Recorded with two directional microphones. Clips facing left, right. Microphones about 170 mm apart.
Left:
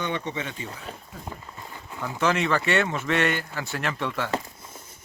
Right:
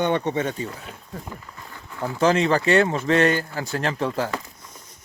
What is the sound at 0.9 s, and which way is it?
Speech, 35° left (ahead or behind).